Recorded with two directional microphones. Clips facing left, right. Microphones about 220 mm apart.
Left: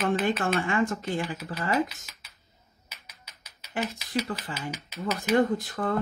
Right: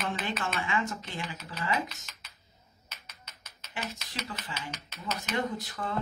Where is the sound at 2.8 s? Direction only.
10° left (ahead or behind).